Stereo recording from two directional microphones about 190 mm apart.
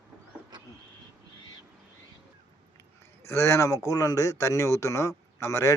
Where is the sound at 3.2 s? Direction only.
15° left (ahead or behind).